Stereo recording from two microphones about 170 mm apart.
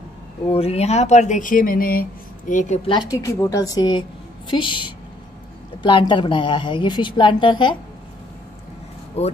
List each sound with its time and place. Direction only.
0.5 s speech: 35° left (ahead or behind)
2.9 s a woman's voice: 25° left (ahead or behind)
9.2 s speech: 40° left (ahead or behind)